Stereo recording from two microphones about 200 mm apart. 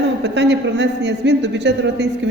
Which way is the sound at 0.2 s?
60° right (ahead or behind).